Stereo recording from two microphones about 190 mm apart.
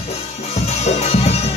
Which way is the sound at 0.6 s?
35° left (ahead or behind).